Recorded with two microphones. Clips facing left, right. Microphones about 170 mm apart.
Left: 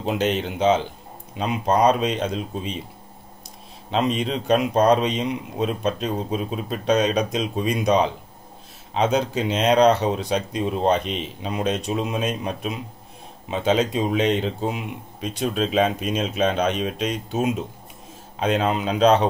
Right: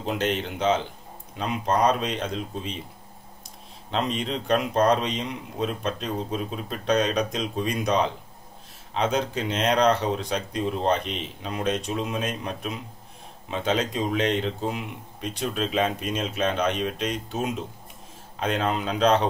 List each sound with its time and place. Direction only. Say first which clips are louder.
0.0 s speech: left 4 dB; 20° left (ahead or behind)
3.9 s speech: left 5 dB; 15° left (ahead or behind)